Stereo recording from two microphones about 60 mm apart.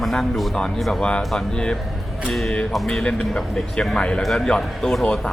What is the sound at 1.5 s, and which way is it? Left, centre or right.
Speech, centre.